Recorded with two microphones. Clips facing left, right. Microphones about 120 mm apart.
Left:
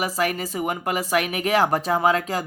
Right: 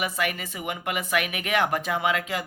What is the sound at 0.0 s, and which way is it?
Speech, 35° left (ahead or behind).